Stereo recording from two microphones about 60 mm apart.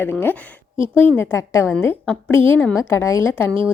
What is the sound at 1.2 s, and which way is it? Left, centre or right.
Speech, left.